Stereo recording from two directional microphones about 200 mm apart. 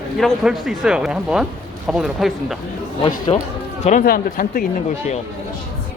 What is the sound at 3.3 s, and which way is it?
Speech, 30° left (ahead or behind).